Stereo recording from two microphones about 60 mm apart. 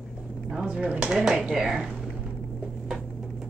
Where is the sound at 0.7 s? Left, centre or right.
Centre.